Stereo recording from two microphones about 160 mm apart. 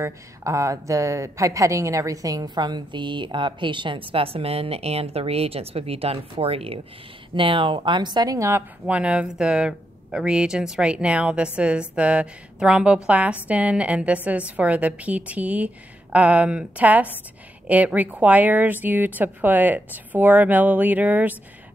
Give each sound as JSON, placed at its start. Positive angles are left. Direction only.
{"t": 0.0, "sound": "a woman's voice", "side_deg": -20}
{"t": 8.8, "sound": "speech", "side_deg": -5}